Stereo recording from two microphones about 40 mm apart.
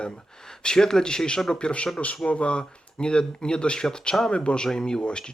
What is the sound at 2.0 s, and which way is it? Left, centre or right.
Speech, left.